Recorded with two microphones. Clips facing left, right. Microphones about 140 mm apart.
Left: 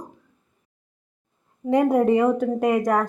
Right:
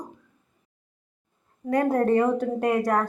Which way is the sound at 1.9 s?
10° left (ahead or behind).